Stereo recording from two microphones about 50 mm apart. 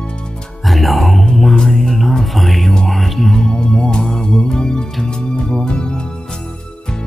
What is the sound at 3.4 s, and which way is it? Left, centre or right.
Music, centre.